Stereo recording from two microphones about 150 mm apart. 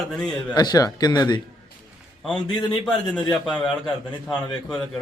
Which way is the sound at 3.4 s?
5° left (ahead or behind).